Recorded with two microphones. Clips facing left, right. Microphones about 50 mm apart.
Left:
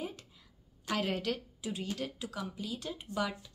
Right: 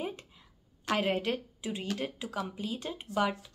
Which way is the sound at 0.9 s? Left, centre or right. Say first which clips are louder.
Right 4 dB; right.